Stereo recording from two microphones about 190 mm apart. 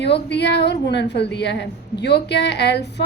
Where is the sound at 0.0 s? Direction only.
65° left (ahead or behind).